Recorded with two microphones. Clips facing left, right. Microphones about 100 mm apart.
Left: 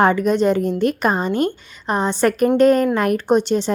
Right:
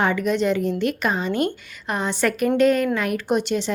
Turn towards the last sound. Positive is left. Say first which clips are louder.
# left 5 dB
turn(degrees=35)  # may be behind; listen again after turning